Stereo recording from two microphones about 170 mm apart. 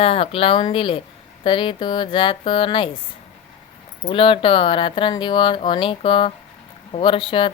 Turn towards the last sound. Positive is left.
turn(degrees=30)  # may be behind; listen again after turning